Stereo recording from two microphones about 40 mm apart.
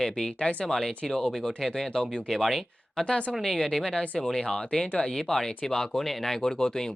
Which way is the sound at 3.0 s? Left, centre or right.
Centre.